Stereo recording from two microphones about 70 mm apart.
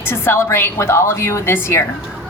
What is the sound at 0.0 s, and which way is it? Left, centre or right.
A woman's voice, left.